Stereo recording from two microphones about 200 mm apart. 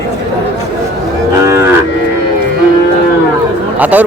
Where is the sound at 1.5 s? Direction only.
15° right (ahead or behind).